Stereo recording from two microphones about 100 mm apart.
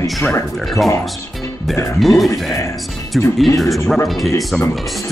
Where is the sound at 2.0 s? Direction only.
Centre (ahead or behind).